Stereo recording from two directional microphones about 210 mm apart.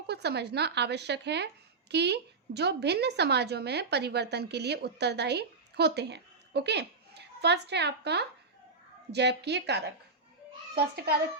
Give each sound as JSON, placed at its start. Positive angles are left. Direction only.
{"t": 0.1, "sound": "a woman's voice", "side_deg": -50}